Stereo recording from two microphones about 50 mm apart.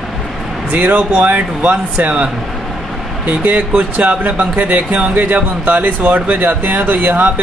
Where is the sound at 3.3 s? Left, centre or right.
Right.